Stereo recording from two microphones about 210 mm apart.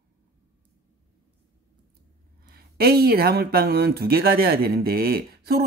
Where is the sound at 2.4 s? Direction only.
45° right (ahead or behind).